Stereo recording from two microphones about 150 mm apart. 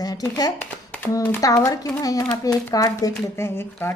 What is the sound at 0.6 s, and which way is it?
A woman's voice, 15° left (ahead or behind).